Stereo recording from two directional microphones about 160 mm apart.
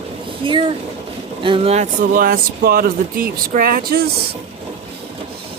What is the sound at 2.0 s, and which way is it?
Speech, 60° right (ahead or behind).